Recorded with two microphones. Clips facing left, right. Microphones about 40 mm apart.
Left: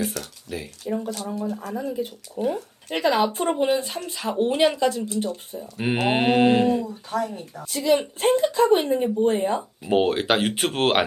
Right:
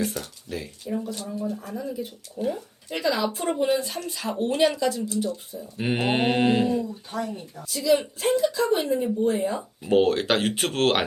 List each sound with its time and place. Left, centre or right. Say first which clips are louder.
0.2 s speech: left 1 dB; centre
1.0 s speech: left 2 dB; left
2.9 s speech: left 4 dB; left
3.5 s speech: right 1 dB; centre
3.8 s speech: left 1 dB; left
4.8 s speech: left 2 dB; left
5.8 s speech: left 2 dB; centre
6.5 s speech: left 3 dB; left
6.8 s speech: left 4 dB; left
9.6 s speech: even; centre